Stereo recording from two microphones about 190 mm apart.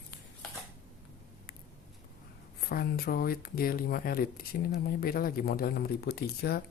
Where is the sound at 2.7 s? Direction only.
50° left (ahead or behind).